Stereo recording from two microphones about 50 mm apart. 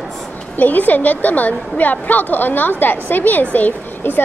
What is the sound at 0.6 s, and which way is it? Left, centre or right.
A woman's voice, left.